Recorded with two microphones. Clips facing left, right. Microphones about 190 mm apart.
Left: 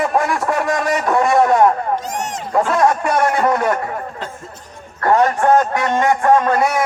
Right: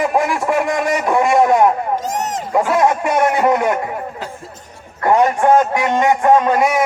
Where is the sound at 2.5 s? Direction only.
15° right (ahead or behind).